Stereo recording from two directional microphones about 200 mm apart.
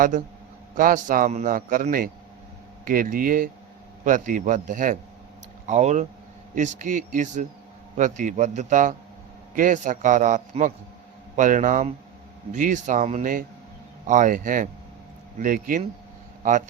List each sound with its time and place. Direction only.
0.8 s a man's voice: 40° right (ahead or behind)